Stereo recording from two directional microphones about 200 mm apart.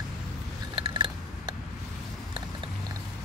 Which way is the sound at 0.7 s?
25° right (ahead or behind).